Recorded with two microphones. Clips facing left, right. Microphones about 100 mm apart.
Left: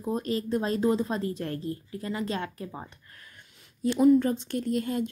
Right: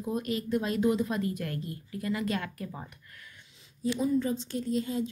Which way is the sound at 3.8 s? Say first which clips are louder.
Left 7 dB; 60° left (ahead or behind).